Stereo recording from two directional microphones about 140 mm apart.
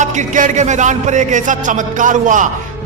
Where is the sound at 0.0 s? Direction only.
60° right (ahead or behind).